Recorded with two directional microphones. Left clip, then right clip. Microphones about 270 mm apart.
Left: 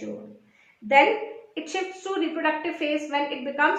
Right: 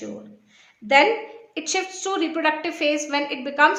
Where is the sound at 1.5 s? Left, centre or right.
Right.